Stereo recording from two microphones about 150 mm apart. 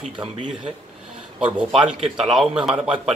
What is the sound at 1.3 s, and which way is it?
A man's voice, 5° right (ahead or behind).